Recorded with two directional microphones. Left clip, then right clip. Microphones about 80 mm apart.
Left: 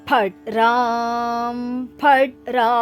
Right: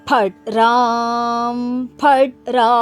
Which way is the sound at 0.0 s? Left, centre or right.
Right.